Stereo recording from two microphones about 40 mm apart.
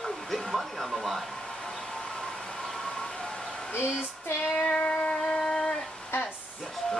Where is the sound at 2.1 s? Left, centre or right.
Centre.